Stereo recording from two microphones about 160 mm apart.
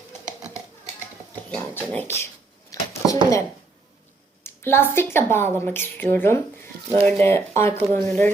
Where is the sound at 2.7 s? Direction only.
20° left (ahead or behind).